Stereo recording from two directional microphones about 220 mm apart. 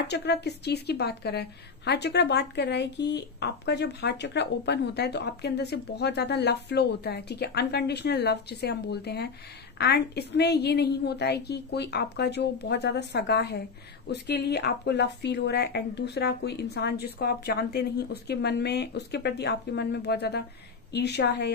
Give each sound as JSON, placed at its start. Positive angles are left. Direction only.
{"t": 0.1, "sound": "a woman's voice", "side_deg": 50}